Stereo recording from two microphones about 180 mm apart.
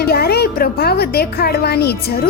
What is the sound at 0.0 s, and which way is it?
A woman's voice, 60° left (ahead or behind).